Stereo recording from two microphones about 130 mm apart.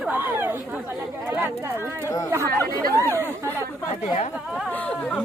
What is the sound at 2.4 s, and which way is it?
Speech, 20° left (ahead or behind).